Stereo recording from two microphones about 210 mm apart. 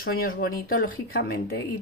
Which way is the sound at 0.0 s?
45° left (ahead or behind).